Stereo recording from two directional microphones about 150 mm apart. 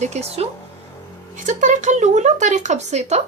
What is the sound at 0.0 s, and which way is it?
Speech, 45° right (ahead or behind).